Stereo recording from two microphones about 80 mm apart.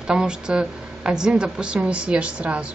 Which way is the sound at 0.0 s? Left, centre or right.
Centre.